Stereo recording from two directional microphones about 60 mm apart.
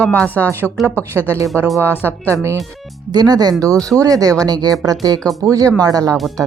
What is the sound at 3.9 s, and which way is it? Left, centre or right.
Speech, right.